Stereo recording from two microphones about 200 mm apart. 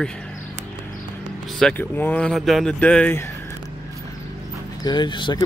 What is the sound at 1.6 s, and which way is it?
Speech, 5° left (ahead or behind).